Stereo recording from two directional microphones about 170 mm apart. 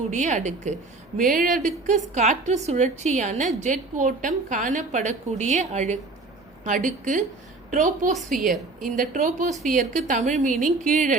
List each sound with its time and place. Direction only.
0.1 s a woman's voice: 45° right (ahead or behind)